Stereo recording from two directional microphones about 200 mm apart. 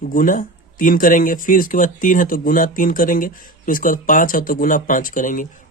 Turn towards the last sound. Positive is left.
turn(degrees=40)  # may be behind; listen again after turning